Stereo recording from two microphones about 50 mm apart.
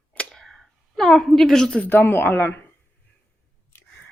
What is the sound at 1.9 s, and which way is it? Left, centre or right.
Speech, left.